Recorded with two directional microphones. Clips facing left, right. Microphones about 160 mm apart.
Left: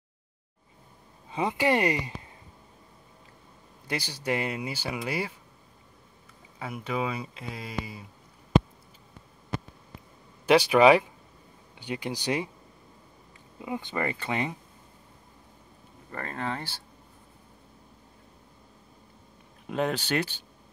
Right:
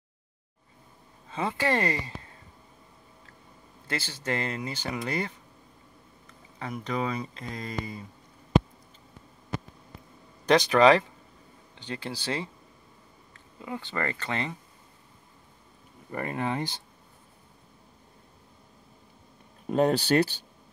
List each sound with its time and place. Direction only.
1.3 s speech: 15° left (ahead or behind)
3.8 s speech: 15° left (ahead or behind)
6.6 s speech: 5° left (ahead or behind)
10.4 s speech: 10° left (ahead or behind)
13.6 s speech: 15° left (ahead or behind)
16.1 s speech: 15° right (ahead or behind)
19.7 s speech: 35° right (ahead or behind)